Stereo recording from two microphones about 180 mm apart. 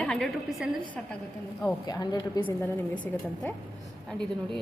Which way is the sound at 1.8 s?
20° left (ahead or behind).